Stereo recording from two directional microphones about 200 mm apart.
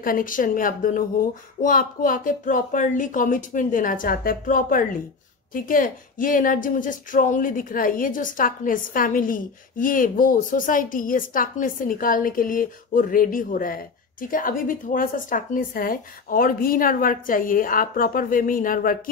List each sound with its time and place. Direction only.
0.0 s speech: 45° left (ahead or behind)